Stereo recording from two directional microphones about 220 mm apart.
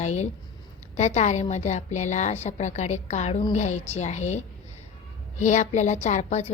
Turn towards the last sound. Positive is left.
turn(degrees=35)  # may be behind; listen again after turning